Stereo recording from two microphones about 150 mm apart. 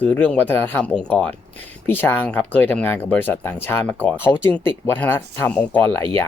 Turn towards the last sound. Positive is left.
turn(degrees=10)  # may be behind; listen again after turning